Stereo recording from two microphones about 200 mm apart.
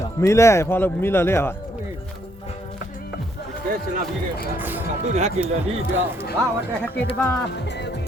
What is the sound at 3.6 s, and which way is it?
Speech, 45° right (ahead or behind).